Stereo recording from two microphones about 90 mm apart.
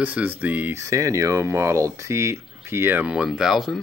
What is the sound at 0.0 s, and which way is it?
Speech, 20° right (ahead or behind).